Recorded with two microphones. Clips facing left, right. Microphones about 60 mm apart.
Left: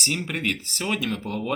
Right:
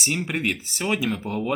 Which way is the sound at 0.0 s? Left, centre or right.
Centre.